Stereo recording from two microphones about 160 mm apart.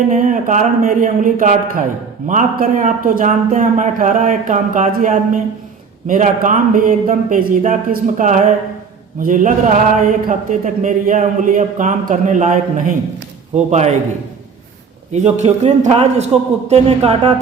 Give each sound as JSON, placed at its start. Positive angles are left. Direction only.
{"t": 0.1, "sound": "a man's voice", "side_deg": -55}
{"t": 13.7, "sound": "speech", "side_deg": -45}
{"t": 15.1, "sound": "speech", "side_deg": -45}